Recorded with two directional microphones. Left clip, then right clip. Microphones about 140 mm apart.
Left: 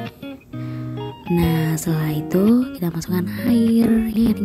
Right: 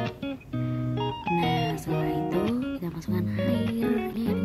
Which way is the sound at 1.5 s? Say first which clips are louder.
Left 4 dB; 50° left (ahead or behind).